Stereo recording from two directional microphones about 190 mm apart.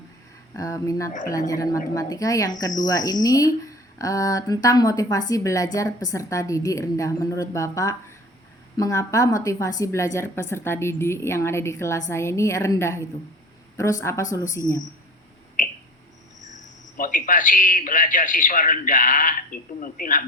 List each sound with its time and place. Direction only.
0.5 s speech: 15° left (ahead or behind)
15.6 s a sound: 40° left (ahead or behind)
17.0 s a man's voice: 45° left (ahead or behind)